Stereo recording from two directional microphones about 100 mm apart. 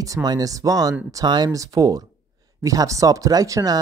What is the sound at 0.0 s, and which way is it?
Speech, 40° right (ahead or behind).